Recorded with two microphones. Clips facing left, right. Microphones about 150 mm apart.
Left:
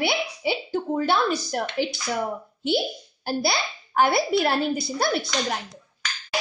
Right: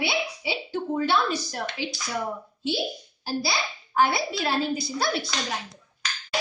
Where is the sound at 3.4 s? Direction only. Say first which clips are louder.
Left 3 dB; 55° left (ahead or behind).